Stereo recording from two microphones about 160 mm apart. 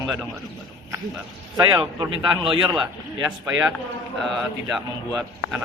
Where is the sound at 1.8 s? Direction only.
30° right (ahead or behind).